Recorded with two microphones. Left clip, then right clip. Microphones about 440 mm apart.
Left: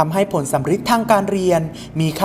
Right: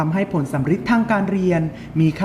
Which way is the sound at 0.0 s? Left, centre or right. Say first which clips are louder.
Left 5 dB; left.